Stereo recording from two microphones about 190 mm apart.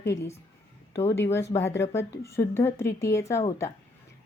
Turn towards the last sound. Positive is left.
turn(degrees=15)  # may be behind; listen again after turning